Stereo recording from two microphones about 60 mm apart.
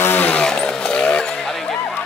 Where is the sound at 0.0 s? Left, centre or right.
Left.